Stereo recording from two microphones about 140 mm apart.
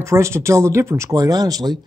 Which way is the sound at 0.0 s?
20° right (ahead or behind).